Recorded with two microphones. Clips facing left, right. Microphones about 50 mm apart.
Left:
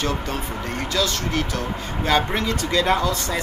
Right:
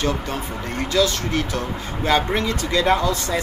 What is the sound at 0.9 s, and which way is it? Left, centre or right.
Speech, right.